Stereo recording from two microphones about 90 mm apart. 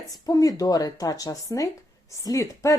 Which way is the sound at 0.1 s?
45° left (ahead or behind).